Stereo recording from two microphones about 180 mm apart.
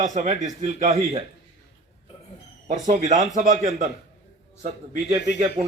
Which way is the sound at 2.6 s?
40° right (ahead or behind).